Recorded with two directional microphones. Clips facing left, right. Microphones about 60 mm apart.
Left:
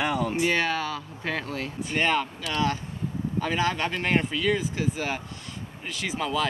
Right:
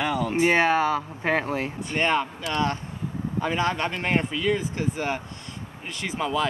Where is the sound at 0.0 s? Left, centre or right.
Centre.